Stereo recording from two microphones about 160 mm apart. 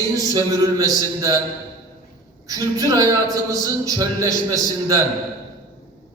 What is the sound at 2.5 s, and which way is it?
Speech, 20° right (ahead or behind).